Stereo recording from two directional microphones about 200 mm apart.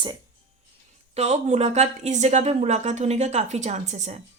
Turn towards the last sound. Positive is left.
turn(degrees=-35)  # may be behind; listen again after turning